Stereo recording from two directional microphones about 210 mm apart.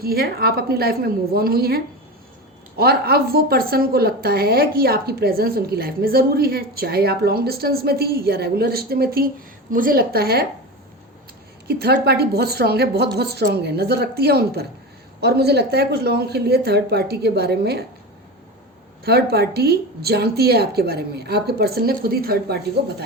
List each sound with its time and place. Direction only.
0.0 s a woman's voice: 45° right (ahead or behind)
11.7 s a woman's voice: 50° right (ahead or behind)
19.0 s a woman's voice: 50° right (ahead or behind)